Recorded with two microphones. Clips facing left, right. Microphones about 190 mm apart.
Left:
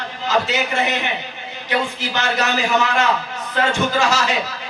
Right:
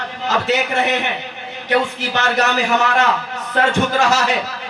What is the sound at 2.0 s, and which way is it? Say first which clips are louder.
Speech: right 3 dB; 60° right (ahead or behind).